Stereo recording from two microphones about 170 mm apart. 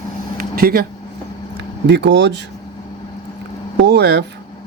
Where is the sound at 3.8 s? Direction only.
80° right.